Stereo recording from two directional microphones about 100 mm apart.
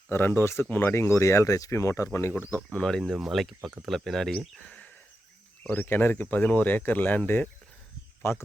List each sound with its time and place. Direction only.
0.1 s speech: 25° left (ahead or behind)
2.7 s speech: 5° left (ahead or behind)
8.2 s speech: 25° left (ahead or behind)